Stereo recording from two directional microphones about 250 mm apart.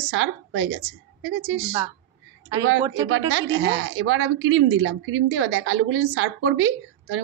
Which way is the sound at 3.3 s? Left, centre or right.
Right.